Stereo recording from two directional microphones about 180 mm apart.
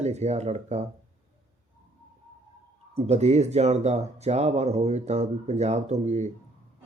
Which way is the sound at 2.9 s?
35° right (ahead or behind).